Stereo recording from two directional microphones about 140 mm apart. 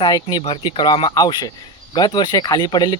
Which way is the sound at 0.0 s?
30° left (ahead or behind).